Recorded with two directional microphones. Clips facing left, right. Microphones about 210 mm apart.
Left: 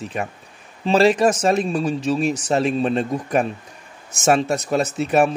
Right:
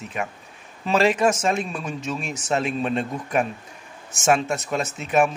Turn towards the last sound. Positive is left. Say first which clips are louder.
# left 3 dB
turn(degrees=35)  # may be behind; listen again after turning